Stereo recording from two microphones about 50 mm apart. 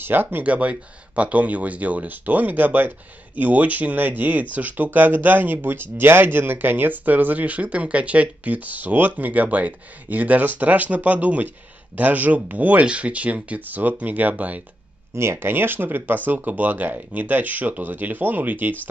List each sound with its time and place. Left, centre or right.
0.0 s speech: right
0.4 s speech: right
15.1 s speech: right